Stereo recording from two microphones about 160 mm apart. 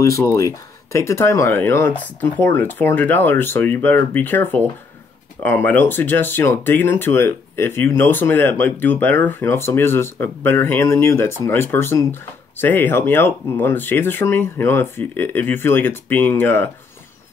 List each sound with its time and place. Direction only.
0.0 s speech: 20° left (ahead or behind)